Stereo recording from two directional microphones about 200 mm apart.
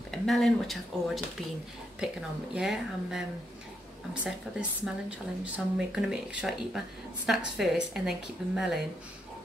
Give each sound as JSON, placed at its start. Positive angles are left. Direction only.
{"t": 0.1, "sound": "speech", "side_deg": 0}
{"t": 2.5, "sound": "speech", "side_deg": 0}